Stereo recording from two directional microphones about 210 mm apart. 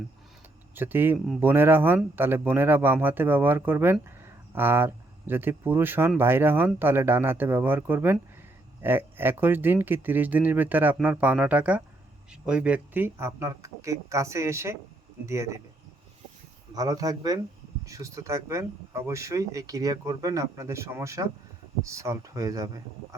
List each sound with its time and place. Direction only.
0.8 s speech: 10° right (ahead or behind)
16.7 s speech: 15° right (ahead or behind)